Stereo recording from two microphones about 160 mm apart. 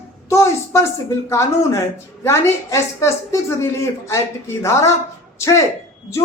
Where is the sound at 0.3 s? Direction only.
15° left (ahead or behind).